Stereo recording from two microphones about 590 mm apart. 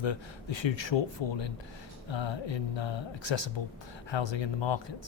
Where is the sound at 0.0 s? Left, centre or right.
Left.